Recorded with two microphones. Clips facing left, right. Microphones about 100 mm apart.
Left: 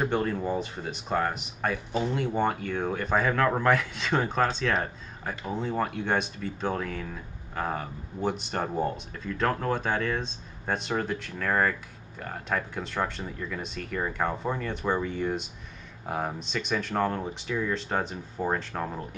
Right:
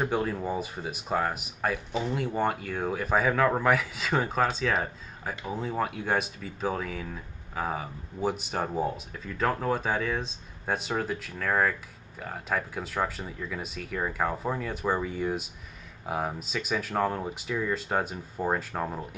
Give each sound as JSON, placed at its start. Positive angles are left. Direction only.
{"t": 0.0, "sound": "speech", "side_deg": -5}